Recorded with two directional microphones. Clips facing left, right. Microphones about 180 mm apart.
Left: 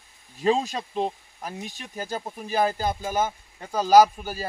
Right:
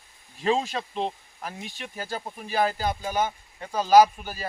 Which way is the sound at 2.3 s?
40° left (ahead or behind).